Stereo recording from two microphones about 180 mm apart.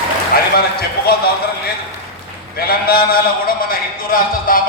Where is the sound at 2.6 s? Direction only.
55° left (ahead or behind).